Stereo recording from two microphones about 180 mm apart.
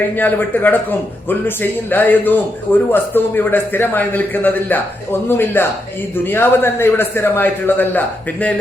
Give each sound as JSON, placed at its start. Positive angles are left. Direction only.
{"t": 0.2, "sound": "a man's voice", "side_deg": 10}